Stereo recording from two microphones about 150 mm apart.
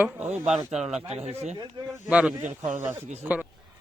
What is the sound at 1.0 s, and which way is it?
Speech, 45° right (ahead or behind).